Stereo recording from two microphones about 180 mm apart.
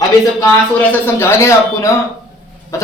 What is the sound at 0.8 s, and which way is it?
A woman's voice, 15° left (ahead or behind).